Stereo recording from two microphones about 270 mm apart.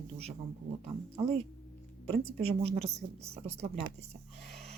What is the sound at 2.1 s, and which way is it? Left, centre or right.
Speech, right.